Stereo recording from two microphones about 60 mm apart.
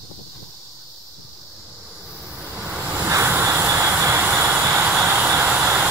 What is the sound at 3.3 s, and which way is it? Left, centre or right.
Vehicle, right.